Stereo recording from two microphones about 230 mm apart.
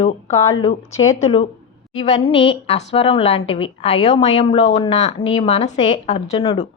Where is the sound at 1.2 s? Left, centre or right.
Left.